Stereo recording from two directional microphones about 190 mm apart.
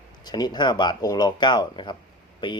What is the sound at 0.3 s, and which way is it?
Speech, 20° left (ahead or behind).